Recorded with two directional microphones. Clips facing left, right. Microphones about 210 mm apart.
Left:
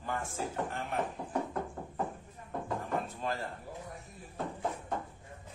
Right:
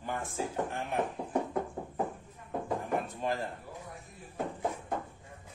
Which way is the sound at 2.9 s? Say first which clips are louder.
Right 2 dB; 15° right (ahead or behind).